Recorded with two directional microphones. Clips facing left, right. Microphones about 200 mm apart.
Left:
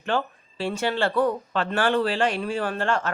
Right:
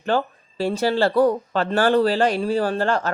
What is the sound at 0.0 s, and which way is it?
Speech, 40° right (ahead or behind).